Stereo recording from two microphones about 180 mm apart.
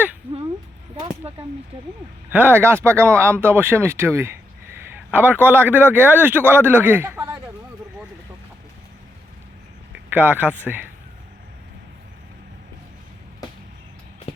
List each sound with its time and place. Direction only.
1.2 s a sound: 35° right (ahead or behind)
2.3 s speech: 10° right (ahead or behind)
10.1 s speech: 10° right (ahead or behind)